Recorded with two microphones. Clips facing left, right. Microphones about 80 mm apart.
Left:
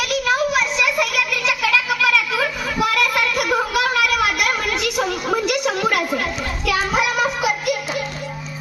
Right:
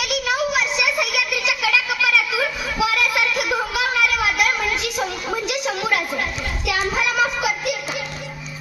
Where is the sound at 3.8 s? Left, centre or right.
Left.